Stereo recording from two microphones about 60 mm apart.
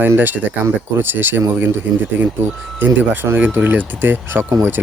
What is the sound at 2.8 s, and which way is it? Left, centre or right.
Speech, right.